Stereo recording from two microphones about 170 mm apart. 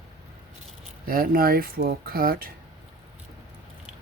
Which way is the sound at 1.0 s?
60° right (ahead or behind).